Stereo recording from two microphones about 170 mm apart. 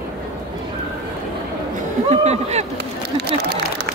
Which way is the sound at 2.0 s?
40° right (ahead or behind).